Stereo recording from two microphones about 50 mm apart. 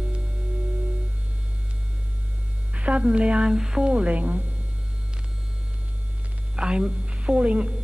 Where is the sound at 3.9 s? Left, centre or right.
Right.